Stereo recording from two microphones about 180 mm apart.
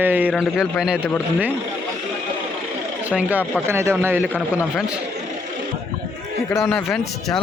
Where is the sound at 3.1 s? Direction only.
10° right (ahead or behind).